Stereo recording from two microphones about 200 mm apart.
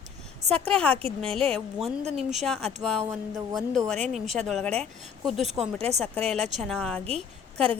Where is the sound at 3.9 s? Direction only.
35° right (ahead or behind).